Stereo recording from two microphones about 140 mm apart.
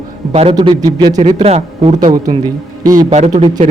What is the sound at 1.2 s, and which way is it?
Speech, 45° right (ahead or behind).